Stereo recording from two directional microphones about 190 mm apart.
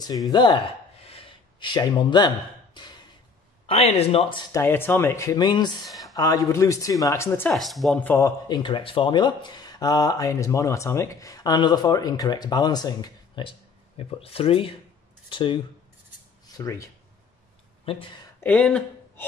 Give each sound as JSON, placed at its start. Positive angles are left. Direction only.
{"t": 0.3, "sound": "gasp", "side_deg": 25}
{"t": 3.6, "sound": "speech", "side_deg": 30}
{"t": 7.5, "sound": "speech", "side_deg": 0}
{"t": 8.5, "sound": "speech", "side_deg": 25}
{"t": 17.8, "sound": "speech", "side_deg": 30}
{"t": 18.4, "sound": "speech", "side_deg": 5}